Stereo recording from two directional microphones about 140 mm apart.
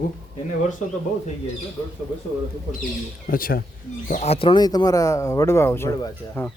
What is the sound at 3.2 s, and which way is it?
Speech, 90° left.